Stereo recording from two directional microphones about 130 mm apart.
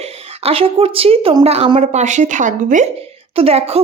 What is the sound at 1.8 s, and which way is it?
A woman's voice, 65° right (ahead or behind).